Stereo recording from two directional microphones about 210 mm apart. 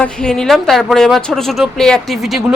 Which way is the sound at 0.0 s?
5° left (ahead or behind).